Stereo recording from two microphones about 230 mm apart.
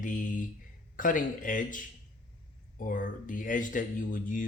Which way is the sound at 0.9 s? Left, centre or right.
Left.